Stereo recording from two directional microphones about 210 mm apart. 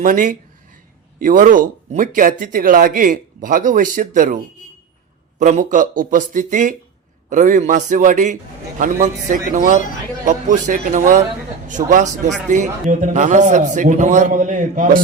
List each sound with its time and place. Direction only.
0.0 s a sound: 40° right (ahead or behind)
1.2 s speech: 40° right (ahead or behind)
5.4 s speech: 35° right (ahead or behind)